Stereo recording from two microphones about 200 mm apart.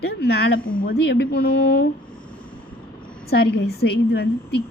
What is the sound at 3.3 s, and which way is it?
A woman's voice, 50° left (ahead or behind).